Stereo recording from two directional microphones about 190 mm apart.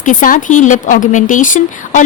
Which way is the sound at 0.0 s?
40° left (ahead or behind).